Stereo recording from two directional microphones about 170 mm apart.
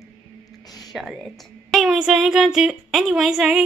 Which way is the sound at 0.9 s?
Centre (ahead or behind).